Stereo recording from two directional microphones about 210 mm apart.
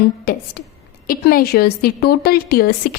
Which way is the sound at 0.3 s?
45° left (ahead or behind).